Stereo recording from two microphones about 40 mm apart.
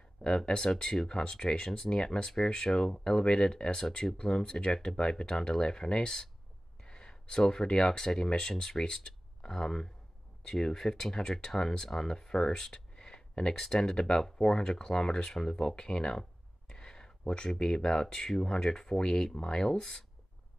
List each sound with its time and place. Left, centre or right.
0.5 s speech: centre
13.6 s speech: centre